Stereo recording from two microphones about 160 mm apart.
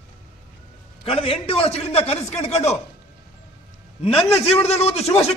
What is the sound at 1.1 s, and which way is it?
A man's voice, 35° left (ahead or behind).